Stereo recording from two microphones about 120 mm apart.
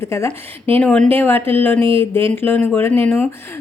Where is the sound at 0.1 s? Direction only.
20° left (ahead or behind).